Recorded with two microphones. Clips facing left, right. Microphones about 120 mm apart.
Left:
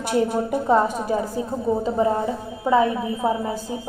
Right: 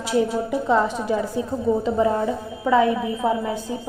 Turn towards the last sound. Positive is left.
turn(degrees=30)  # may be behind; listen again after turning